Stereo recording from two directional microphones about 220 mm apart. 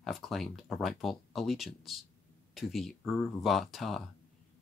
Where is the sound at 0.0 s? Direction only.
Centre (ahead or behind).